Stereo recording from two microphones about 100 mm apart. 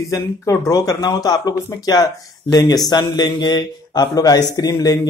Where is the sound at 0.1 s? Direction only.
30° left (ahead or behind).